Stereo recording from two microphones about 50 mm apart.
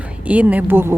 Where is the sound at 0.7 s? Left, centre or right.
Right.